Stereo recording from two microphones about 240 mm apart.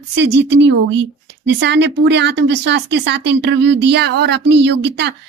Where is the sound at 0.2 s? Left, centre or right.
Right.